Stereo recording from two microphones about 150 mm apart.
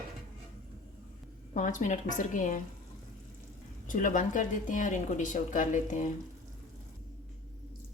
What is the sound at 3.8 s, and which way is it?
A woman's voice, 60° left (ahead or behind).